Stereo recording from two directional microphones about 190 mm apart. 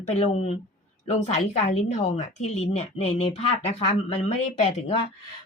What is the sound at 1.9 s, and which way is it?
Speech, 35° left (ahead or behind).